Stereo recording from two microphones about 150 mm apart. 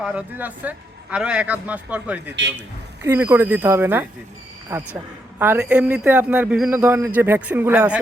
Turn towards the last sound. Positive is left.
turn(degrees=-10)  # may be behind; listen again after turning